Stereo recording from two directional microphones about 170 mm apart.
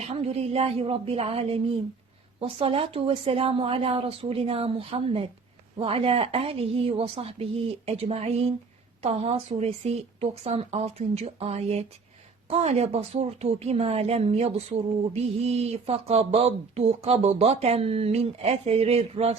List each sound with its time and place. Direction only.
0.1 s speech: 35° right (ahead or behind)